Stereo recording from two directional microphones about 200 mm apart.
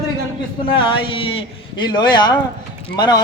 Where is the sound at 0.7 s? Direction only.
25° left (ahead or behind).